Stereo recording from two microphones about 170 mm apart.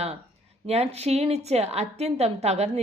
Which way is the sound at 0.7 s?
40° right (ahead or behind).